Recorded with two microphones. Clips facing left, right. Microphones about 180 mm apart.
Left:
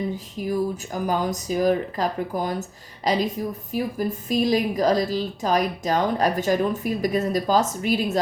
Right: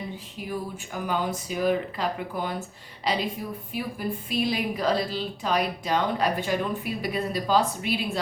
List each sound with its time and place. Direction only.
0.3 s a woman's voice: 40° left (ahead or behind)